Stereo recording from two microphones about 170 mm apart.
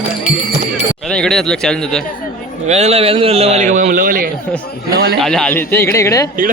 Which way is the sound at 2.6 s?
40° right (ahead or behind).